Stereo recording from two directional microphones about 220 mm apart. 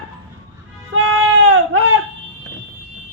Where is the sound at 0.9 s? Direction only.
75° right (ahead or behind).